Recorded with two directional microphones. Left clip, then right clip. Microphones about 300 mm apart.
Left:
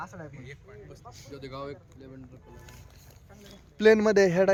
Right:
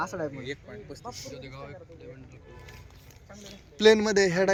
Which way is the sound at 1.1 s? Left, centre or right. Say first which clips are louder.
Right 5 dB; centre.